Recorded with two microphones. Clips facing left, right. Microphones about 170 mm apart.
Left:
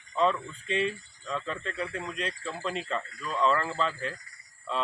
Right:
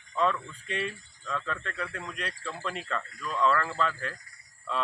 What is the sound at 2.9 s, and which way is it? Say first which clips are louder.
Speech: left 1 dB; 25° left (ahead or behind).